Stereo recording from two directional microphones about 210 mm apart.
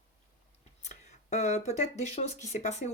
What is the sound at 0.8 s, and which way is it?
Speech, 35° left (ahead or behind).